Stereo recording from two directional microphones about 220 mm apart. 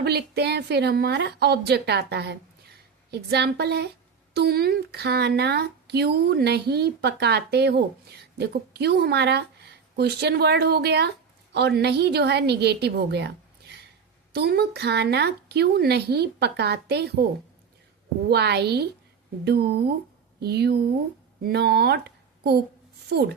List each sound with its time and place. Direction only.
0.0 s speech: 50° right (ahead or behind)
18.3 s speech: 50° right (ahead or behind)
23.0 s a woman's voice: 50° right (ahead or behind)